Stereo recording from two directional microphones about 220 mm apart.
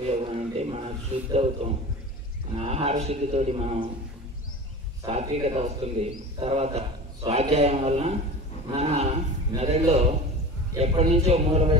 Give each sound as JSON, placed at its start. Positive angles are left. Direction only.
{"t": 0.1, "sound": "a man's voice", "side_deg": -30}
{"t": 5.0, "sound": "a man's voice", "side_deg": -30}